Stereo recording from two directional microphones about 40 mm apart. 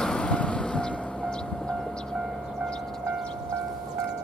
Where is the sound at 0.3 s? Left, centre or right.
Left.